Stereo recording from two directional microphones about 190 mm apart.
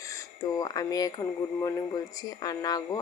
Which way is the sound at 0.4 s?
20° left (ahead or behind).